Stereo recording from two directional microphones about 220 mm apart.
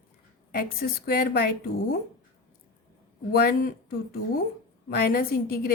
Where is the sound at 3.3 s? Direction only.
45° left (ahead or behind).